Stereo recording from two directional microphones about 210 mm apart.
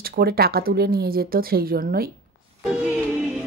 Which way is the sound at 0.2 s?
45° right (ahead or behind).